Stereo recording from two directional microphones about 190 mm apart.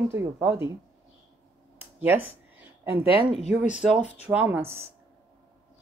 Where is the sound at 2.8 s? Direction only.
10° right (ahead or behind).